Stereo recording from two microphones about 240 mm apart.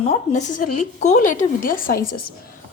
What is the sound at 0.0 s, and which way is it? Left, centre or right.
A woman's voice, left.